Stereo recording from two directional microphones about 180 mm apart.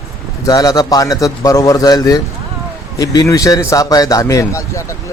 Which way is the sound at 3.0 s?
20° left (ahead or behind).